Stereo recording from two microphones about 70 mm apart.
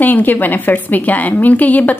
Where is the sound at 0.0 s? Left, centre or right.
Left.